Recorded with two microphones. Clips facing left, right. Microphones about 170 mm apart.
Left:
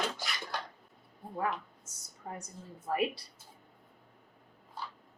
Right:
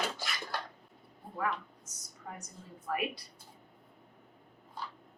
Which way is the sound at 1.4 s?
30° left (ahead or behind).